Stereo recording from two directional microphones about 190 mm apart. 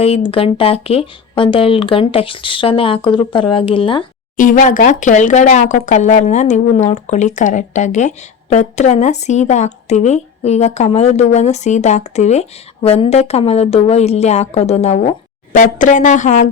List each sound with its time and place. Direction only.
0.0 s speech: 30° left (ahead or behind)
4.4 s speech: 45° left (ahead or behind)